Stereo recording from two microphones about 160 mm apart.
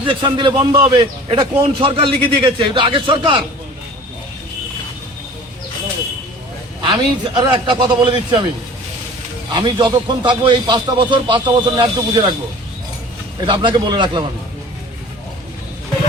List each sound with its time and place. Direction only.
0.0 s a man's voice: 30° right (ahead or behind)
6.8 s speech: 30° right (ahead or behind)
9.5 s speech: 30° right (ahead or behind)
13.5 s speech: 30° right (ahead or behind)